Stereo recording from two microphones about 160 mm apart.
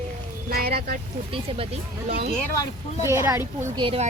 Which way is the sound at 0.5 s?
70° right (ahead or behind).